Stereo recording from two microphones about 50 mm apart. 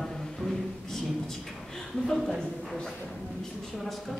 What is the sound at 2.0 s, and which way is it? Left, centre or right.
Speech, centre.